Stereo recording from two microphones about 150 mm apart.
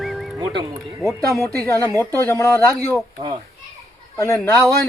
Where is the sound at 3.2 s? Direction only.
40° right (ahead or behind).